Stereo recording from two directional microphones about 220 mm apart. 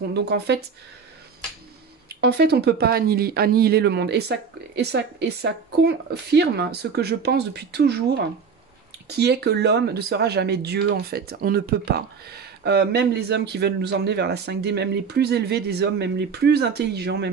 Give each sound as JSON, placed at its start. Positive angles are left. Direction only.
{"t": 0.1, "sound": "speech", "side_deg": -50}
{"t": 2.0, "sound": "speech", "side_deg": -50}
{"t": 9.1, "sound": "speech", "side_deg": -50}